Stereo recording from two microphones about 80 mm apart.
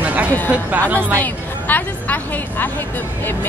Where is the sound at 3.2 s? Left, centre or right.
Left.